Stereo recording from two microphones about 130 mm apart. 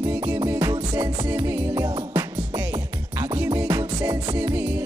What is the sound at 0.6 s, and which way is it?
Music, 35° right (ahead or behind).